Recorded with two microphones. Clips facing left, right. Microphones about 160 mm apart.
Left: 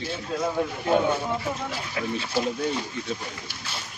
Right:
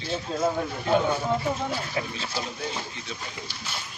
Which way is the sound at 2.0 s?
30° right (ahead or behind).